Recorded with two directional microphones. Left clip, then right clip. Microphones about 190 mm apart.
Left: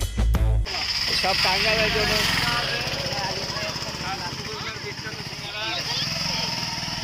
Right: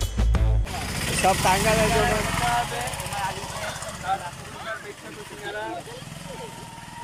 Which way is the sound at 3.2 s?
25° left (ahead or behind).